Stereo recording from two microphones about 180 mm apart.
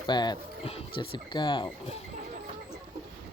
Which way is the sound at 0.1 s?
25° left (ahead or behind).